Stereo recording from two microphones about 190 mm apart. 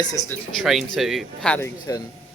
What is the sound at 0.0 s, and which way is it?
Speech, 20° left (ahead or behind).